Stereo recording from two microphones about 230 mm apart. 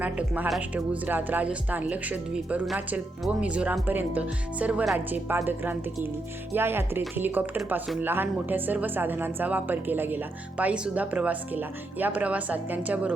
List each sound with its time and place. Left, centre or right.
0.0 s speech: centre